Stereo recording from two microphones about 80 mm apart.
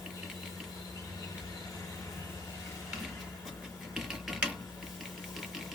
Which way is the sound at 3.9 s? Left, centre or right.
Centre.